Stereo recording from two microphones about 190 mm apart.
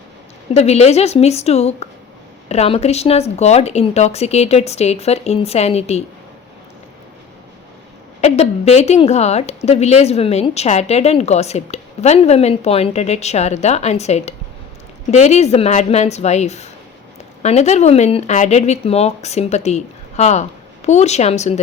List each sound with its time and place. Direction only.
0.5 s a woman's voice: 35° left (ahead or behind)
8.2 s a woman's voice: 35° left (ahead or behind)